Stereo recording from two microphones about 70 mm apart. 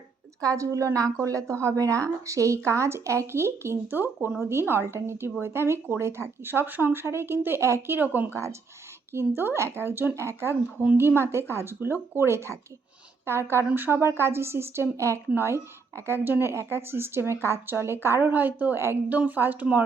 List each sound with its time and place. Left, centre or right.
0.4 s a woman's voice: right
8.3 s a woman's voice: right
19.0 s speech: right